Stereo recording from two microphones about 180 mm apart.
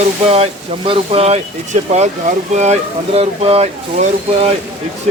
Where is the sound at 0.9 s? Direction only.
35° right (ahead or behind).